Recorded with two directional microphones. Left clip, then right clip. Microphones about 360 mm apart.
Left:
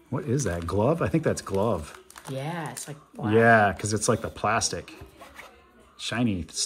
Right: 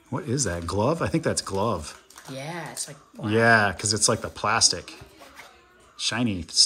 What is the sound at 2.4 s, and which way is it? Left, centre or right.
Speech, centre.